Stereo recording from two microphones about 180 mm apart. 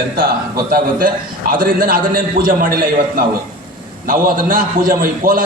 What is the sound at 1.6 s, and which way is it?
A man's voice, 55° right (ahead or behind).